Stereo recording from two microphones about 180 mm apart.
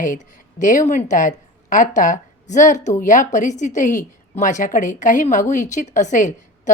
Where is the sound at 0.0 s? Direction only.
45° left (ahead or behind).